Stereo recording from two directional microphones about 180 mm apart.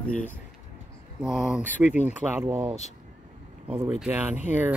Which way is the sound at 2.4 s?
10° right (ahead or behind).